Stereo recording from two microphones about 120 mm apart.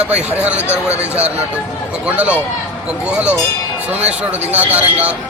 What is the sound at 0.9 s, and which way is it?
Speech, 60° right (ahead or behind).